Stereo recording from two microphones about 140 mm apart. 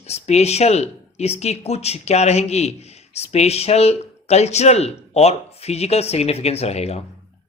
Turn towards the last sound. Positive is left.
turn(degrees=50)  # may be behind; listen again after turning